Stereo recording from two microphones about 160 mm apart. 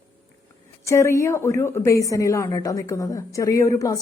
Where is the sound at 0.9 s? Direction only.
20° left (ahead or behind).